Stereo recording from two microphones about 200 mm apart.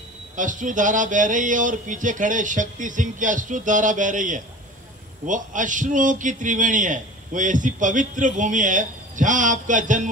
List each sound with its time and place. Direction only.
0.4 s a man's voice: 40° right (ahead or behind)